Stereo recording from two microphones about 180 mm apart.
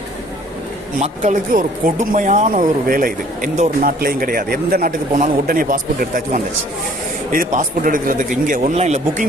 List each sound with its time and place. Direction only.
0.9 s speech: 45° right (ahead or behind)